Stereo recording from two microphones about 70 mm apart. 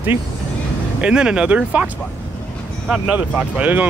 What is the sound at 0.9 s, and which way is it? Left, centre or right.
Speech, centre.